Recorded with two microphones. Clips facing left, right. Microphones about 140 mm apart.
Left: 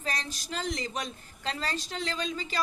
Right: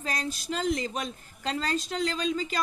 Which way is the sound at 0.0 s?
45° right (ahead or behind).